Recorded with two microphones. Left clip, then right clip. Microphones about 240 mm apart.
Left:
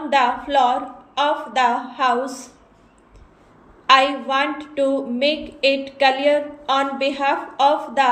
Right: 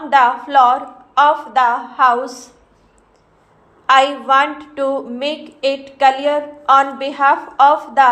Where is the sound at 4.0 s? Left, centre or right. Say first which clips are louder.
Right 5 dB; right.